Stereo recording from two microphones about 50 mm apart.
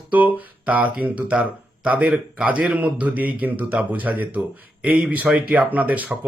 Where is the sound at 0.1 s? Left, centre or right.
Right.